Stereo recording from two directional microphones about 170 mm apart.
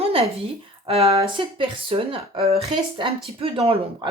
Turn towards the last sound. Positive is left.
turn(degrees=-35)  # may be behind; listen again after turning